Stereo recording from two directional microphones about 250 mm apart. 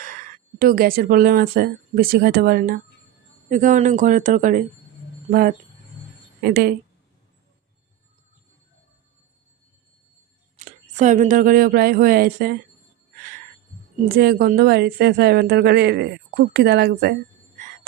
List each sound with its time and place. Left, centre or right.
0.0 s a woman's voice: right
10.7 s a woman's voice: right
14.1 s a woman's voice: right